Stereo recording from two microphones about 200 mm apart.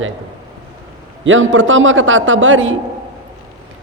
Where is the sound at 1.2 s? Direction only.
75° right (ahead or behind).